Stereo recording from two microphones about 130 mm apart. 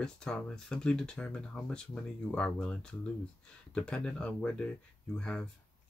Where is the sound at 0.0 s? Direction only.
5° left (ahead or behind).